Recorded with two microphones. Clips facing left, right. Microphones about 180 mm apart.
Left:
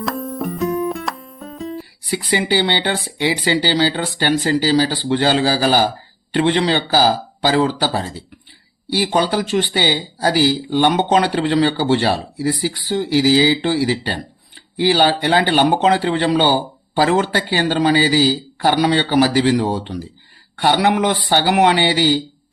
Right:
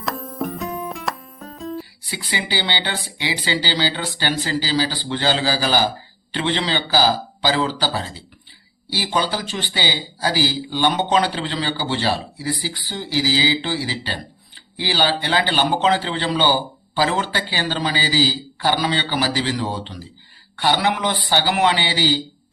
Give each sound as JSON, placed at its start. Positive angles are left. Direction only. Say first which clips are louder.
{"t": 0.0, "sound": "music", "louder": "left 3 dB", "side_deg": 0}
{"t": 2.0, "sound": "speech", "louder": "left 10 dB", "side_deg": 50}
{"t": 5.4, "sound": "a man's voice", "louder": "left 4 dB", "side_deg": 40}
{"t": 9.2, "sound": "speech", "louder": "left 8 dB", "side_deg": 60}